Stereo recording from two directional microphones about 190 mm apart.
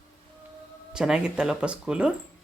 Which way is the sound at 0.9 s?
5° right (ahead or behind).